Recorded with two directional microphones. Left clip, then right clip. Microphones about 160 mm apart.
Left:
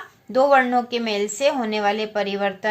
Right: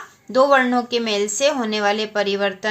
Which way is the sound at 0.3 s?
30° right (ahead or behind).